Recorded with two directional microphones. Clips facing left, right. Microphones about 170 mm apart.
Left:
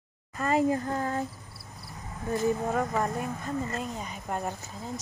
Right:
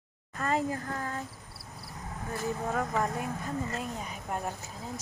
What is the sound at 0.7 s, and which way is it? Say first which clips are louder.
Child singing: left 7 dB; 30° left (ahead or behind).